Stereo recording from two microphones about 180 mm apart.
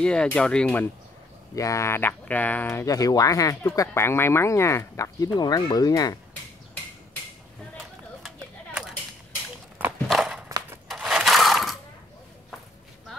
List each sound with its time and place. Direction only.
0.0 s speech: 5° left (ahead or behind)
1.5 s speech: 20° left (ahead or behind)
10.0 s walk: centre (ahead or behind)
10.9 s coin: centre (ahead or behind)